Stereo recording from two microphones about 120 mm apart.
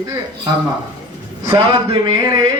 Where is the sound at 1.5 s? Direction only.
45° right (ahead or behind).